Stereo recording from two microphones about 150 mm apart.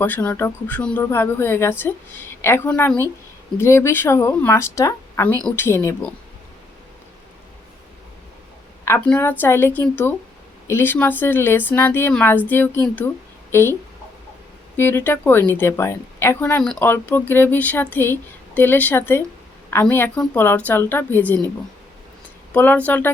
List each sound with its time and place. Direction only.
0.0 s a woman's voice: 10° left (ahead or behind)
9.0 s a woman's voice: 10° left (ahead or behind)
14.8 s a woman's voice: 15° left (ahead or behind)
22.5 s a woman's voice: 10° left (ahead or behind)